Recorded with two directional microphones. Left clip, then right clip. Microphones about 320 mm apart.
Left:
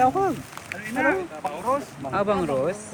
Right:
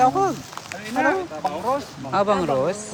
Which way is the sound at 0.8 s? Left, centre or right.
Right.